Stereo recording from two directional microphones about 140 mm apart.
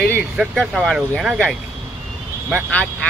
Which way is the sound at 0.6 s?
Centre (ahead or behind).